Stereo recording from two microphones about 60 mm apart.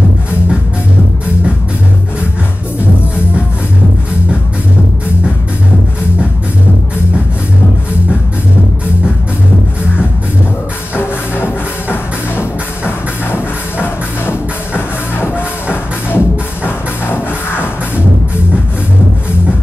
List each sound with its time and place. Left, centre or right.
11.0 s music: left